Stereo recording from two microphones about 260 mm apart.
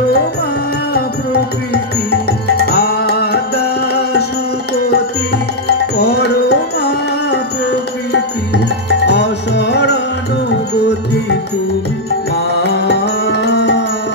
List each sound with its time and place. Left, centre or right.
0.9 s music: left
5.7 s music: left
12.6 s music: left